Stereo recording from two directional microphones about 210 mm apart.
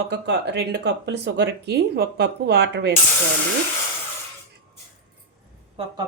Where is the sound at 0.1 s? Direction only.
55° right (ahead or behind).